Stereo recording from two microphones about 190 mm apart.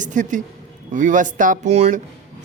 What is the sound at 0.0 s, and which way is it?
Speech, 40° right (ahead or behind).